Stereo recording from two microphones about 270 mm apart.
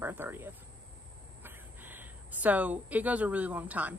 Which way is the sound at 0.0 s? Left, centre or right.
Centre.